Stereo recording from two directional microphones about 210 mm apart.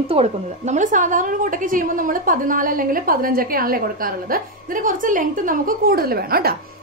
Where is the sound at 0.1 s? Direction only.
30° right (ahead or behind).